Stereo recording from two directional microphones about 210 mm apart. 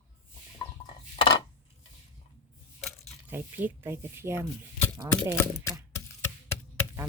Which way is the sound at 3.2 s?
10° right (ahead or behind).